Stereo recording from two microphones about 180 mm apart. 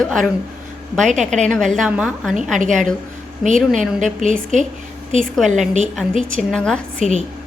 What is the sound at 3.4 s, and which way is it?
Speech, 45° right (ahead or behind).